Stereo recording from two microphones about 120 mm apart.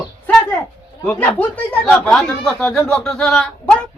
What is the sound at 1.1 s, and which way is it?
Speech, 15° left (ahead or behind).